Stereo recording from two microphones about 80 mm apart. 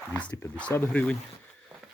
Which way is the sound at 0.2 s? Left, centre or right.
Centre.